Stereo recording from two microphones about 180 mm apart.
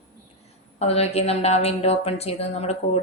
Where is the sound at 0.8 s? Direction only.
35° left (ahead or behind).